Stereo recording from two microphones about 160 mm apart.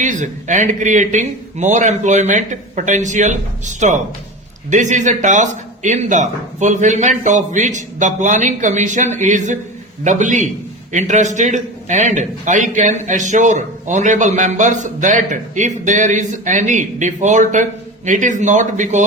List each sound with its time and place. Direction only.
0.0 s a man's voice: 50° right (ahead or behind)